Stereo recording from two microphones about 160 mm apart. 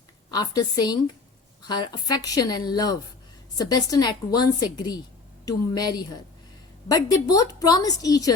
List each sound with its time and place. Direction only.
0.3 s a woman's voice: 25° left (ahead or behind)